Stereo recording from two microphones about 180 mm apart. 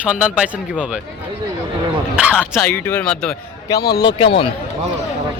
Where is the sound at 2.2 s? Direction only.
5° right (ahead or behind).